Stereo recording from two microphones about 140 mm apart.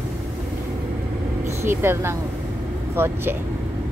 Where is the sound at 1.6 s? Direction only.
15° right (ahead or behind).